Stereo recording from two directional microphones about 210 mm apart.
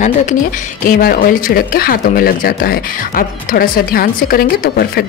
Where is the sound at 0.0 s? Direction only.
40° left (ahead or behind).